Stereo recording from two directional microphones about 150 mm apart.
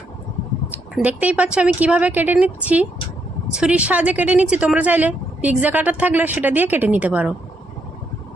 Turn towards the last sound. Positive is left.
turn(degrees=-10)  # may be behind; listen again after turning